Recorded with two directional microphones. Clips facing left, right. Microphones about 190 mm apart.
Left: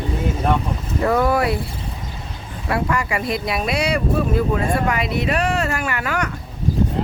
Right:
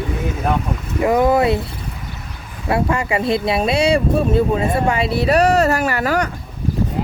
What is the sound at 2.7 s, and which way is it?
Speech, 25° right (ahead or behind).